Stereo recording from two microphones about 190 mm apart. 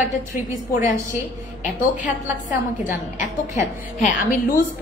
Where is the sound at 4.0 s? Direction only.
45° left (ahead or behind).